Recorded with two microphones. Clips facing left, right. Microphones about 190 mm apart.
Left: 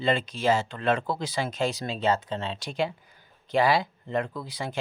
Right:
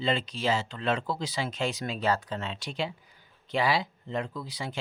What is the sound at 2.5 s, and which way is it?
Speech, 45° left (ahead or behind).